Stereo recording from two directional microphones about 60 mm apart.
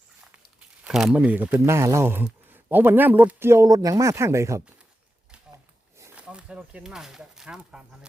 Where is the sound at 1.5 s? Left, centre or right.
Right.